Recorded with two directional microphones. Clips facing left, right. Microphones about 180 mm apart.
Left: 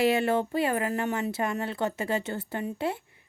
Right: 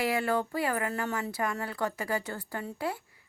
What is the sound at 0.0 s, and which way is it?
Speech, 25° left (ahead or behind).